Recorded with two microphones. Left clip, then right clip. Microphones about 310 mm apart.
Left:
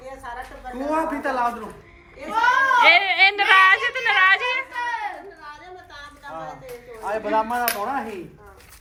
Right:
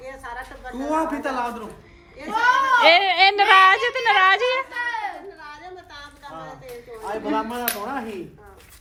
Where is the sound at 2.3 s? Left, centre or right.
Right.